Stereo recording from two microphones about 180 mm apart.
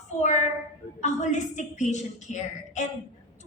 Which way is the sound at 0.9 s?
40° left (ahead or behind).